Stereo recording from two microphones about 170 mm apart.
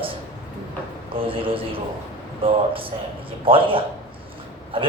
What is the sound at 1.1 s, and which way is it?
A woman's voice, 30° right (ahead or behind).